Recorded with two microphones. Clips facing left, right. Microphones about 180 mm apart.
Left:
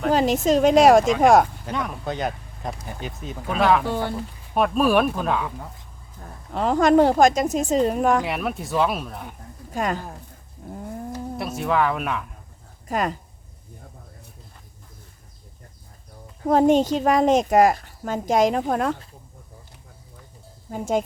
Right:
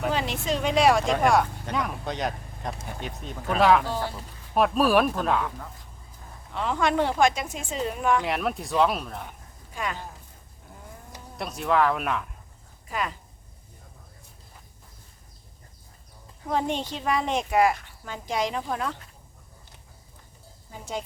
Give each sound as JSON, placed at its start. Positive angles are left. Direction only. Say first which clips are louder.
{"t": 0.1, "sound": "a woman's voice", "louder": "left 9 dB", "side_deg": 40}
{"t": 1.6, "sound": "speech", "louder": "left 2 dB", "side_deg": 0}
{"t": 3.8, "sound": "speech", "louder": "left 4 dB", "side_deg": 60}
{"t": 4.5, "sound": "speech", "louder": "left 2 dB", "side_deg": 0}
{"t": 6.5, "sound": "speech", "louder": "left 8 dB", "side_deg": 40}
{"t": 8.2, "sound": "speech", "louder": "left 1 dB", "side_deg": 0}
{"t": 9.7, "sound": "a woman's voice", "louder": "left 7 dB", "side_deg": 45}
{"t": 10.6, "sound": "cat", "louder": "left 13 dB", "side_deg": 40}
{"t": 11.3, "sound": "speech", "louder": "left 1 dB", "side_deg": 0}
{"t": 12.9, "sound": "a woman's voice", "louder": "left 6 dB", "side_deg": 45}
{"t": 16.5, "sound": "a woman's voice", "louder": "left 11 dB", "side_deg": 45}
{"t": 20.7, "sound": "a woman's voice", "louder": "left 11 dB", "side_deg": 50}